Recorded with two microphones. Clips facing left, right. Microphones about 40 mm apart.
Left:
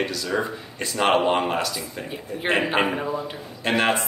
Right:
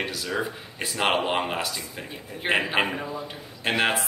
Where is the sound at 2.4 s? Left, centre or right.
Centre.